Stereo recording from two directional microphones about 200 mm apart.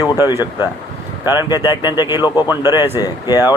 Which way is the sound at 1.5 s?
20° left (ahead or behind).